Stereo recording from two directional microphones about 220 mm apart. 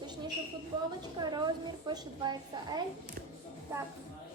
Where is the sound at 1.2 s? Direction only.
20° right (ahead or behind).